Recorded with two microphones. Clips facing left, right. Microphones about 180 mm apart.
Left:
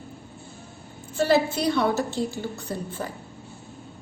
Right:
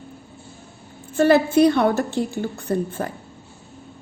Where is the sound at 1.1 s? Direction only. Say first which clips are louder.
Right 6 dB; 55° right (ahead or behind).